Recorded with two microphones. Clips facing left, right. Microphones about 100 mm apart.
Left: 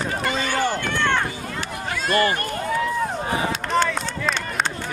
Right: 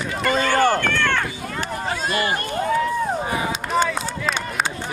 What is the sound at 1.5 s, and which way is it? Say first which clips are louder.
Run: right 3 dB; 40° right (ahead or behind).